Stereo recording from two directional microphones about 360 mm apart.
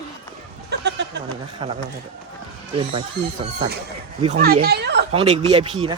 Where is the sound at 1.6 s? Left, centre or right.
Centre.